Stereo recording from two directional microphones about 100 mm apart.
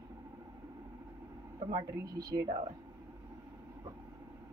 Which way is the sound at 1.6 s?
40° right (ahead or behind).